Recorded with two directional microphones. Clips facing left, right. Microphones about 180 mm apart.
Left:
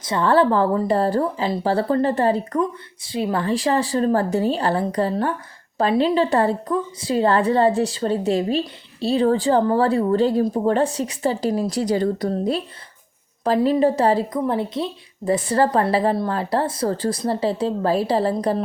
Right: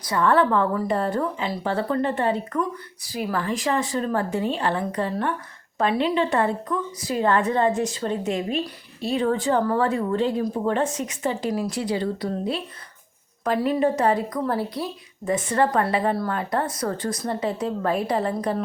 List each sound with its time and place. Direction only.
0.0 s a woman's voice: 25° left (ahead or behind)
3.1 s a woman's voice: 25° left (ahead or behind)
15.2 s a woman's voice: 35° left (ahead or behind)